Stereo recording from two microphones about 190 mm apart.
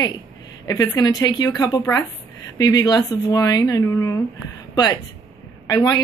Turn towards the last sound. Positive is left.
turn(degrees=20)  # may be behind; listen again after turning